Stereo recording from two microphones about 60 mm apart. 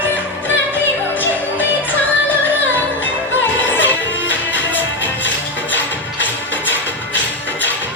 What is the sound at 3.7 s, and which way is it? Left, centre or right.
Music, left.